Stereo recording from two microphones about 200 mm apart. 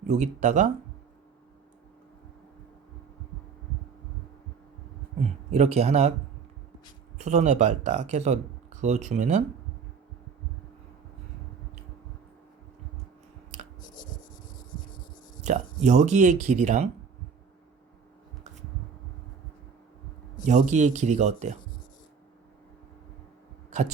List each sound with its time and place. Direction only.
0.1 s speech: 35° right (ahead or behind)
5.5 s speech: 35° right (ahead or behind)
7.2 s speech: 35° right (ahead or behind)
15.4 s speech: 35° right (ahead or behind)
20.4 s speech: 35° right (ahead or behind)